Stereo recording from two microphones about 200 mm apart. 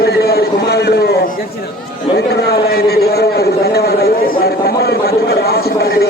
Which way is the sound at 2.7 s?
50° left (ahead or behind).